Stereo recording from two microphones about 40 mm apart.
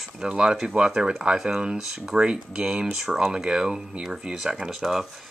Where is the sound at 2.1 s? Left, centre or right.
Right.